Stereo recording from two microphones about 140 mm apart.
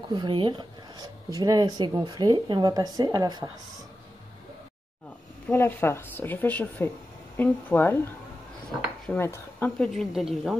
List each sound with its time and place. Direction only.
0.1 s speech: 35° right (ahead or behind)
5.5 s a woman's voice: 15° left (ahead or behind)
9.1 s speech: 15° left (ahead or behind)
9.8 s a woman's voice: centre (ahead or behind)